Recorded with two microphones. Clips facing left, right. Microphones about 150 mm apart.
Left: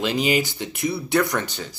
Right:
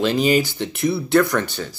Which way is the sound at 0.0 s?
15° left (ahead or behind).